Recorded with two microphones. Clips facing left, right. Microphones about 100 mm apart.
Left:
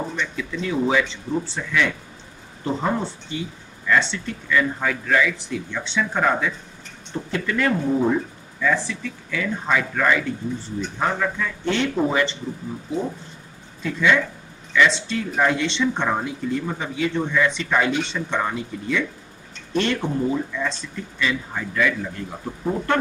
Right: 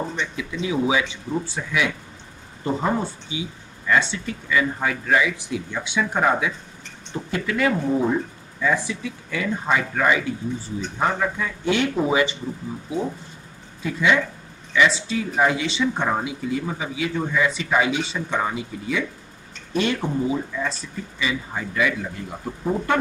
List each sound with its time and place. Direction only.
0.1 s speech: 5° right (ahead or behind)
8.5 s speech: 15° right (ahead or behind)
13.8 s speech: 10° right (ahead or behind)